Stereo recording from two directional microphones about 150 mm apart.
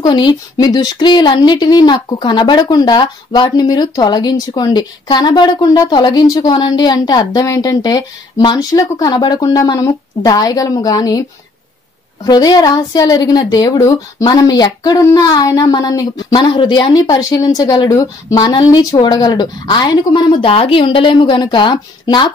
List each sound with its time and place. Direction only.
0.0 s speech: 30° left (ahead or behind)
12.3 s speech: 25° left (ahead or behind)